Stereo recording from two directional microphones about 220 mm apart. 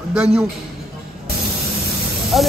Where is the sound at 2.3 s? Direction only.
Centre (ahead or behind).